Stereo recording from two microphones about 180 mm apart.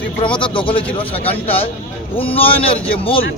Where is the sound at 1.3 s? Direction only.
30° left (ahead or behind).